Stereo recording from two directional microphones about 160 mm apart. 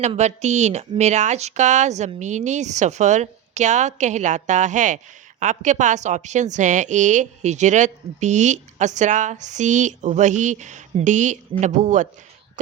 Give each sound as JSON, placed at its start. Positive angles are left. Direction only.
{"t": 0.2, "sound": "a woman's voice", "side_deg": -45}